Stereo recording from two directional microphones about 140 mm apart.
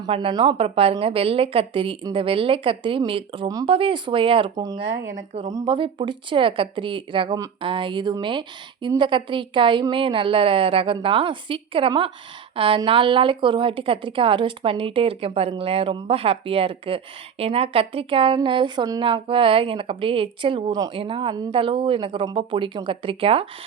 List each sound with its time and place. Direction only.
0.1 s a woman's voice: 35° right (ahead or behind)
4.5 s speech: 25° right (ahead or behind)
5.3 s a woman's voice: 50° right (ahead or behind)
5.5 s a woman's voice: 35° right (ahead or behind)